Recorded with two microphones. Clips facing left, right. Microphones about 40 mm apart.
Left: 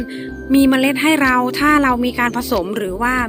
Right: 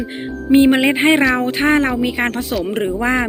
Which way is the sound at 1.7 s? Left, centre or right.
Centre.